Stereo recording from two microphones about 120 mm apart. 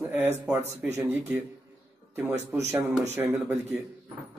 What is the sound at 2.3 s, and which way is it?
Speech, 70° right (ahead or behind).